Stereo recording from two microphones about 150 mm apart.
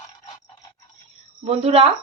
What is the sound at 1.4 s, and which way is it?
Speech, 40° right (ahead or behind).